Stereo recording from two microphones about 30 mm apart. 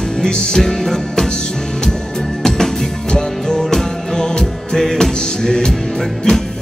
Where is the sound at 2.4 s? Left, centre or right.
Centre.